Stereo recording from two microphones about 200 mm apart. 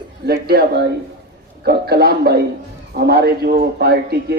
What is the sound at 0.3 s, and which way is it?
Speech, 50° right (ahead or behind).